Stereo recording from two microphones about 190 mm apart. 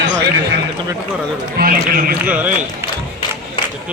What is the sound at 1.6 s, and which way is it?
Speech, 50° right (ahead or behind).